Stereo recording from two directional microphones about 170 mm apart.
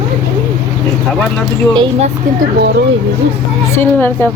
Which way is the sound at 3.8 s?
10° left (ahead or behind).